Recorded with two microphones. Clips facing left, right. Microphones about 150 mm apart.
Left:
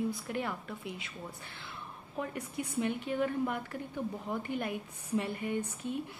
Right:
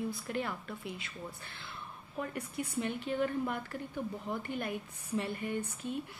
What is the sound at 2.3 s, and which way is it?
Speech, 10° left (ahead or behind).